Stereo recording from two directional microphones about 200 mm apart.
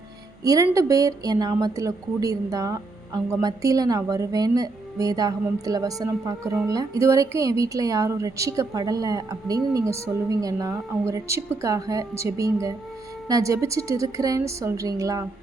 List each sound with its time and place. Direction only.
0.4 s speech: 15° right (ahead or behind)